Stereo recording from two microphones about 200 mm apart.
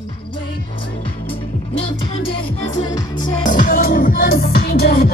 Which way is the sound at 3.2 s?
40° left (ahead or behind).